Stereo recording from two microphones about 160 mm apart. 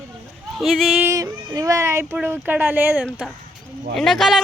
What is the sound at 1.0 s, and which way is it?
Speech, 20° right (ahead or behind).